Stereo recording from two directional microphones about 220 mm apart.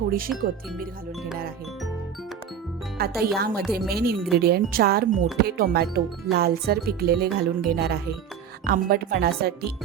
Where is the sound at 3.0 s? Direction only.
45° right (ahead or behind).